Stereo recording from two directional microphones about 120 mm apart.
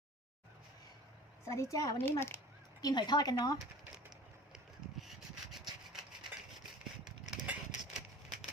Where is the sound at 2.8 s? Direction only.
35° left (ahead or behind).